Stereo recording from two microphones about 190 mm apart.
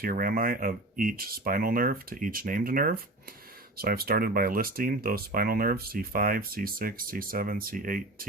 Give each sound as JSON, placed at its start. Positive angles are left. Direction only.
{"t": 0.0, "sound": "speech", "side_deg": -50}